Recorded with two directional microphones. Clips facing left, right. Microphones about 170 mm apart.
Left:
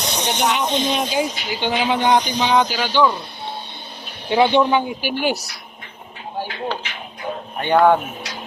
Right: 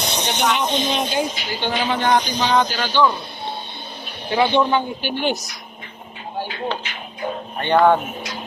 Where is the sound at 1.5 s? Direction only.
15° left (ahead or behind).